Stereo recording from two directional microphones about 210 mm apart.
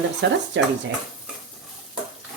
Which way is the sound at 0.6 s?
60° right (ahead or behind).